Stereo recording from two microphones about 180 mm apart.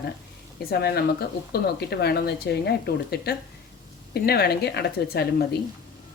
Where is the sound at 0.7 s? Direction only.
60° left (ahead or behind).